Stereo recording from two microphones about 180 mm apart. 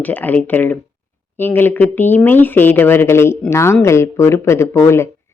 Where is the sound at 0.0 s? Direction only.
10° left (ahead or behind).